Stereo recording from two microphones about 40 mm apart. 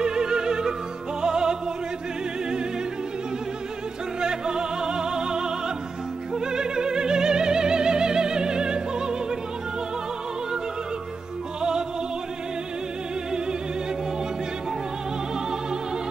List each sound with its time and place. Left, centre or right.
0.0 s opera: centre
1.2 s music: centre
4.2 s opera: centre